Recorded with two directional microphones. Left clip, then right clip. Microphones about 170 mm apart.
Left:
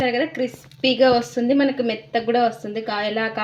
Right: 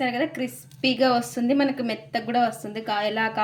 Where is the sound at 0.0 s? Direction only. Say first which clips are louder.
Left 4 dB; 20° left (ahead or behind).